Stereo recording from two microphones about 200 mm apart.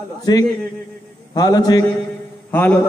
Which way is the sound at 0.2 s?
20° left (ahead or behind).